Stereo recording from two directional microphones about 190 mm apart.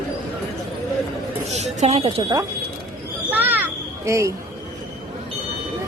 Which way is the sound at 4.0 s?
15° right (ahead or behind).